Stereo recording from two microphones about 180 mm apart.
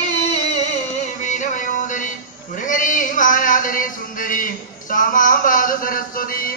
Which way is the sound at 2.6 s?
45° left (ahead or behind).